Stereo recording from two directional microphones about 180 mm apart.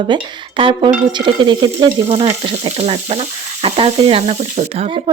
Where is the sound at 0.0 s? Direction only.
25° right (ahead or behind).